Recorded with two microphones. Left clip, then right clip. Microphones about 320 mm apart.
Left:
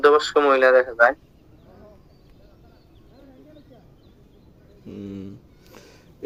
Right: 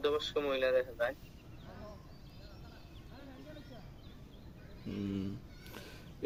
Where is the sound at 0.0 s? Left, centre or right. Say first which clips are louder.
Left 18 dB; left.